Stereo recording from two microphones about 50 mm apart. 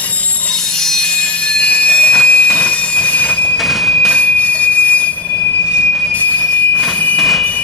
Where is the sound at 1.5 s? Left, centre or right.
Left.